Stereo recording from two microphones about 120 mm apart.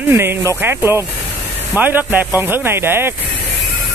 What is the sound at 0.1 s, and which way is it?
Speech, 20° right (ahead or behind).